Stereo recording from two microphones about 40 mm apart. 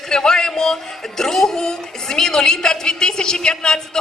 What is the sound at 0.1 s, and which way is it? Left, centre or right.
Speech, centre.